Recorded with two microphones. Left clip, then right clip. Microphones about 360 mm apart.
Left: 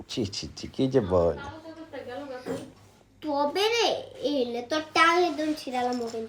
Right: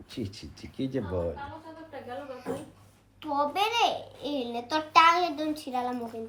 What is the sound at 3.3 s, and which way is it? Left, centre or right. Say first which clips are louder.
A child's voice: left 1 dB; centre.